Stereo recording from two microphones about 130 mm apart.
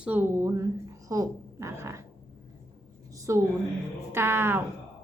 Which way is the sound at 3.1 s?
25° right (ahead or behind).